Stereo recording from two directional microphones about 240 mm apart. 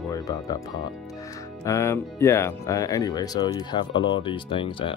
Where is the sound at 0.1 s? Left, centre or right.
Centre.